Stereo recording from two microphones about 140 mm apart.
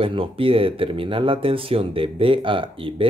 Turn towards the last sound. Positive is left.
turn(degrees=-40)  # may be behind; listen again after turning